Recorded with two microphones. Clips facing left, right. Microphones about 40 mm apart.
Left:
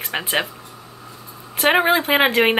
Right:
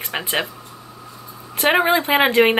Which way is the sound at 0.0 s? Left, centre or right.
Centre.